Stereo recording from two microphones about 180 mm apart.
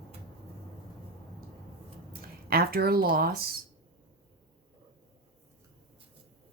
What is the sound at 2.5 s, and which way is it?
Speech, 55° right (ahead or behind).